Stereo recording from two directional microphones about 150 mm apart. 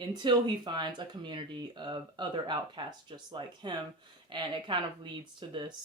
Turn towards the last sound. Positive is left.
turn(degrees=-30)  # may be behind; listen again after turning